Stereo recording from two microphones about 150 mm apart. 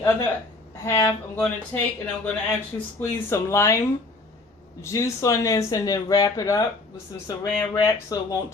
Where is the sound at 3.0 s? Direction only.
15° left (ahead or behind).